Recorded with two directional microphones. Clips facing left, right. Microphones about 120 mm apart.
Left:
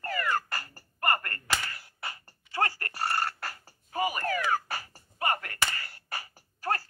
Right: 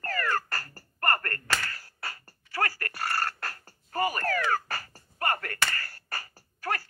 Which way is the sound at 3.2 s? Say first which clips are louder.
Even; 10° left (ahead or behind).